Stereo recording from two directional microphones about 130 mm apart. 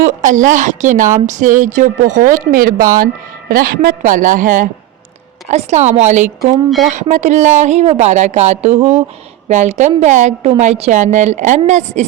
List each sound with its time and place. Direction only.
0.0 s a woman's voice: 80° right
5.5 s speech: 60° right (ahead or behind)